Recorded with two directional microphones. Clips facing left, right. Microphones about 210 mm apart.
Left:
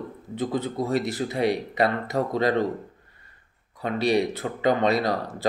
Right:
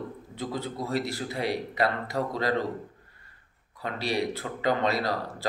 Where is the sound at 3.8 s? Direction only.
20° left (ahead or behind).